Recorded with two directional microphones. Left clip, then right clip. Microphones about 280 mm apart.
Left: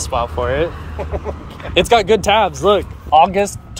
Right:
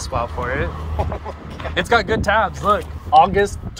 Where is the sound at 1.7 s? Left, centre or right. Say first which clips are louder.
Left 5 dB; left.